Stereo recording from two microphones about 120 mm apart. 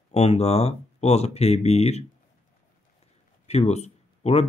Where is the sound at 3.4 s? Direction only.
60° left (ahead or behind).